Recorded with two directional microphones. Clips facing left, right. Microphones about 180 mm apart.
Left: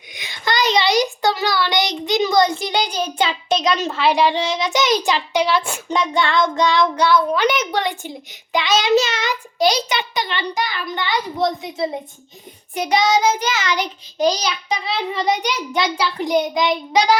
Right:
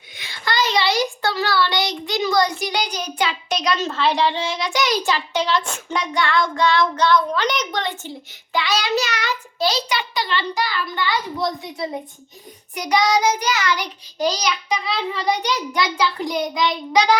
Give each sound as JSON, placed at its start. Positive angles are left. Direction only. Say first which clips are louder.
{"t": 0.1, "sound": "a child's voice", "louder": "left 3 dB", "side_deg": 15}
{"t": 5.9, "sound": "a child's voice", "louder": "left 2 dB", "side_deg": 25}